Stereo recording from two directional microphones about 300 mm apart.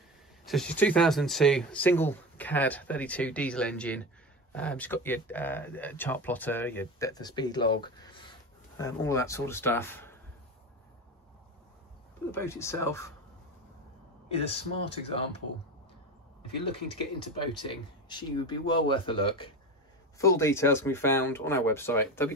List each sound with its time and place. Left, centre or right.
0.5 s speech: centre
12.3 s speech: centre
14.5 s speech: centre
17.6 s speech: centre